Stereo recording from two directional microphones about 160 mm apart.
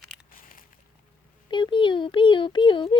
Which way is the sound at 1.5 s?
30° left (ahead or behind).